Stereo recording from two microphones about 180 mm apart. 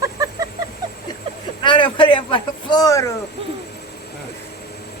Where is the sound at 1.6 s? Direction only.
25° left (ahead or behind).